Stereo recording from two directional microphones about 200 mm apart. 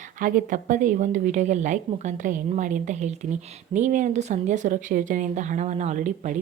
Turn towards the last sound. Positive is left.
turn(degrees=-40)  # may be behind; listen again after turning